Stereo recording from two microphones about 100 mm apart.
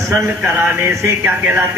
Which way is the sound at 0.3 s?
20° right (ahead or behind).